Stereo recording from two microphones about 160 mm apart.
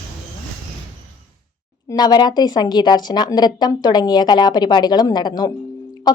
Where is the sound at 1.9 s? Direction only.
25° left (ahead or behind).